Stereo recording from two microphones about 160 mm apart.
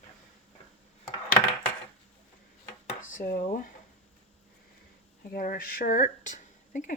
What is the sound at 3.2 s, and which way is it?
Speech, 55° left (ahead or behind).